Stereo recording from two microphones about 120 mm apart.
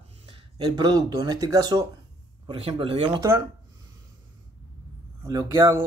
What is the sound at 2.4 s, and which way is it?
Speech, 50° right (ahead or behind).